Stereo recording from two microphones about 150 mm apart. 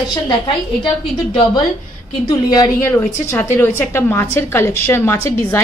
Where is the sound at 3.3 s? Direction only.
15° left (ahead or behind).